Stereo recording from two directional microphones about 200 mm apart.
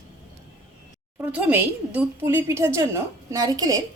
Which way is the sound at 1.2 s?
5° right (ahead or behind).